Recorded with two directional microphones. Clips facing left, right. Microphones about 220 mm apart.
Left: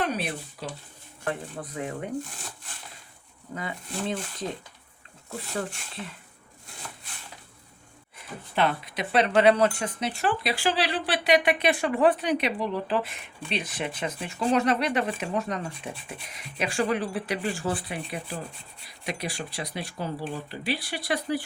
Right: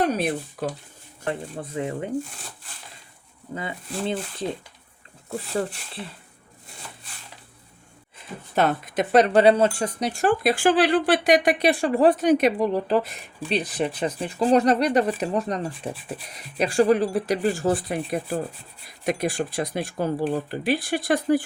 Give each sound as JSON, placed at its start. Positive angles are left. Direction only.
{"t": 0.0, "sound": "speech", "side_deg": -45}
{"t": 1.2, "sound": "speech", "side_deg": -25}
{"t": 3.5, "sound": "speech", "side_deg": -25}
{"t": 8.5, "sound": "speech", "side_deg": -45}
{"t": 9.8, "sound": "speech", "side_deg": -45}